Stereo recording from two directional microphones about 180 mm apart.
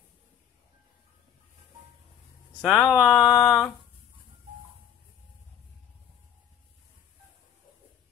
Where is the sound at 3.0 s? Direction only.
5° right (ahead or behind).